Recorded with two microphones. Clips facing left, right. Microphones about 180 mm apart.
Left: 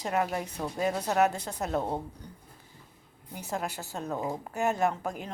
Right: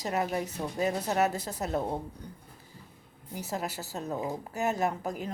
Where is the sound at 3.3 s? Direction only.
40° right (ahead or behind).